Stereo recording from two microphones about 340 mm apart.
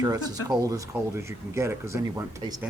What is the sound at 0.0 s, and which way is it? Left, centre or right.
A man's voice, centre.